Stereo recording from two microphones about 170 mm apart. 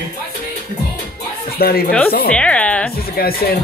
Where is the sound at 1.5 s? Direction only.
65° left (ahead or behind).